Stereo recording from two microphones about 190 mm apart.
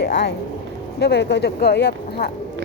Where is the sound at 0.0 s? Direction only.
60° left (ahead or behind).